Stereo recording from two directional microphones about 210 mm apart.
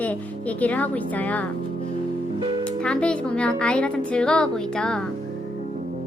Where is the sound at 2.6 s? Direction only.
5° left (ahead or behind).